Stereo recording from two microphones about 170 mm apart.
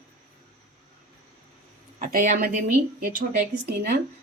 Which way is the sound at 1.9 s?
50° right (ahead or behind).